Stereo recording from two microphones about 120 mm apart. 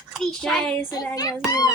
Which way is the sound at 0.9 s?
30° left (ahead or behind).